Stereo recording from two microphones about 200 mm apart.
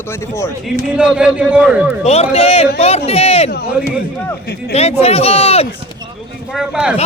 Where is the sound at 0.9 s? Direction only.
5° right (ahead or behind).